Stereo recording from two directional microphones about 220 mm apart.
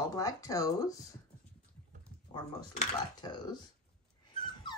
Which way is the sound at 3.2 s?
20° left (ahead or behind).